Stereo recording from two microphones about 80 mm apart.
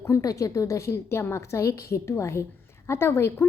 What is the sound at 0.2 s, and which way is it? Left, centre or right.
Speech, left.